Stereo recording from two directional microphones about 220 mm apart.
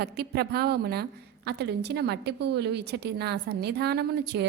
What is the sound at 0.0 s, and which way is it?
A woman's voice, 45° right (ahead or behind).